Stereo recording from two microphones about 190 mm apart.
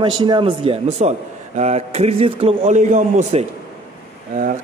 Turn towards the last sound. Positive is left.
turn(degrees=-40)  # may be behind; listen again after turning